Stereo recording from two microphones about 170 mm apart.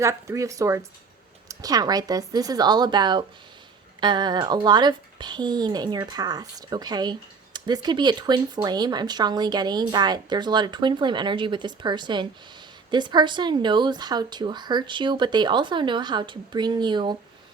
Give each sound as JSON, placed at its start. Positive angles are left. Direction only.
{"t": 0.0, "sound": "speech", "side_deg": -15}